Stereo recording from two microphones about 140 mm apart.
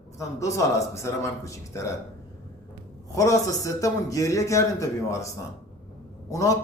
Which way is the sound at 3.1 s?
25° left (ahead or behind).